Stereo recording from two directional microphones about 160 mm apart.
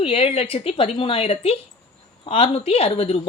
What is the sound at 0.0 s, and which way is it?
Speech, 40° left (ahead or behind).